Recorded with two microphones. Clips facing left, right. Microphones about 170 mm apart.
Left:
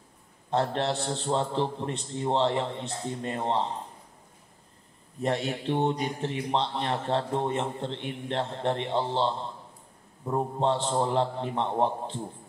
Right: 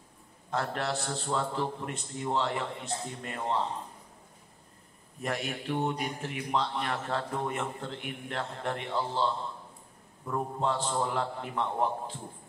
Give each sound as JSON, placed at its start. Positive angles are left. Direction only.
{"t": 0.5, "sound": "a man's voice", "side_deg": 30}
{"t": 5.2, "sound": "a man's voice", "side_deg": 30}